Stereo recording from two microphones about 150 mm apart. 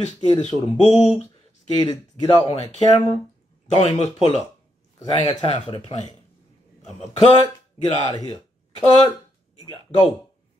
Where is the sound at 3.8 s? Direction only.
45° left (ahead or behind).